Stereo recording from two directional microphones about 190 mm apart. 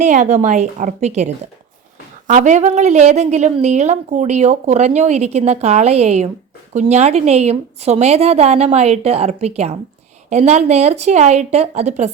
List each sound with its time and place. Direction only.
0.0 s a woman's voice: 40° right (ahead or behind)